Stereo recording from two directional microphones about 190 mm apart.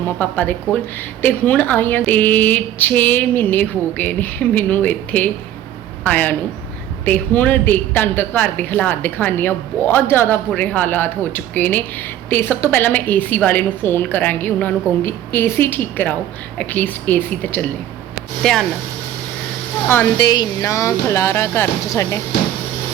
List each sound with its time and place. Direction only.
0.2 s a woman's voice: 10° left (ahead or behind)
18.1 s a sound: centre (ahead or behind)
19.9 s a woman's voice: 15° left (ahead or behind)